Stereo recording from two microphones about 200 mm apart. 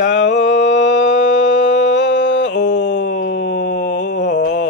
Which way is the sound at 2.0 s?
65° left (ahead or behind).